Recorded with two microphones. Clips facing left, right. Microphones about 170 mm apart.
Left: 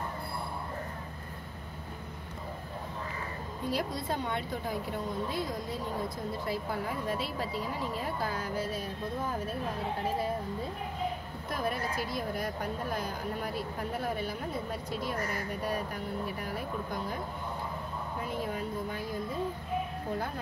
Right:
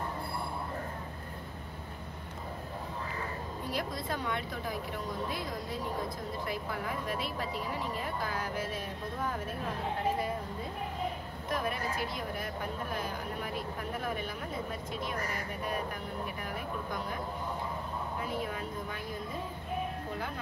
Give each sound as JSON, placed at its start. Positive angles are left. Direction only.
{"t": 3.7, "sound": "speech", "side_deg": 25}
{"t": 6.4, "sound": "speech", "side_deg": 30}
{"t": 12.4, "sound": "speech", "side_deg": 40}